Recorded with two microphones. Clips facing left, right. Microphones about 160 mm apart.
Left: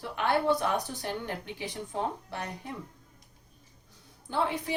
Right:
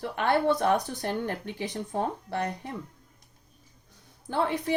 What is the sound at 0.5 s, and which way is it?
Speech, 45° right (ahead or behind).